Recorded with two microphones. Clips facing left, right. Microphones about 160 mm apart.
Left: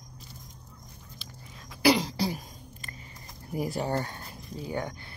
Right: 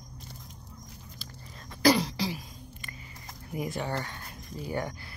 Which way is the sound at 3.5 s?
40° left (ahead or behind).